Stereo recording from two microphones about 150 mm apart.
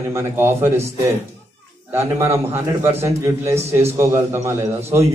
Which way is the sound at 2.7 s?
20° right (ahead or behind).